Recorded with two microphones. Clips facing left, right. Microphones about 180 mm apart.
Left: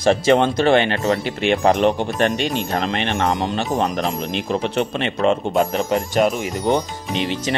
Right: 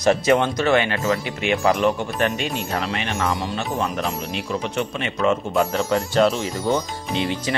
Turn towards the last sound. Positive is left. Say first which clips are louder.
# left 1 dB
turn(degrees=20)  # may be behind; listen again after turning